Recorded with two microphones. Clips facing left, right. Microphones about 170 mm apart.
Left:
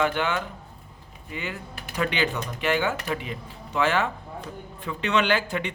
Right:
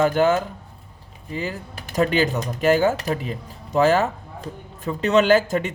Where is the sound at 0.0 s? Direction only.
40° right (ahead or behind).